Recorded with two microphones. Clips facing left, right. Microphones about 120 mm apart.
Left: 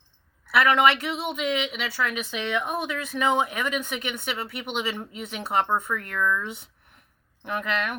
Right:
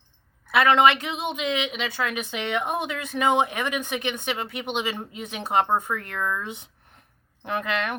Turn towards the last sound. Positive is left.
turn(degrees=-25)  # may be behind; listen again after turning